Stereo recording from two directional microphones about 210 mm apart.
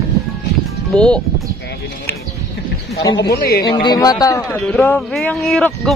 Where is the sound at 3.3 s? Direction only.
45° left (ahead or behind).